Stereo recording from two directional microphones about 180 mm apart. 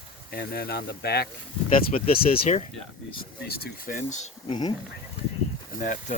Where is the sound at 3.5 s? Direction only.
55° left (ahead or behind); by 4.5 s 40° left (ahead or behind).